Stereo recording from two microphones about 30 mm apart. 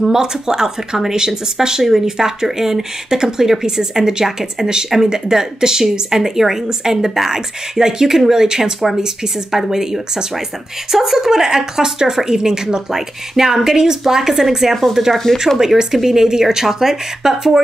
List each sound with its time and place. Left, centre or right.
0.0 s speech: centre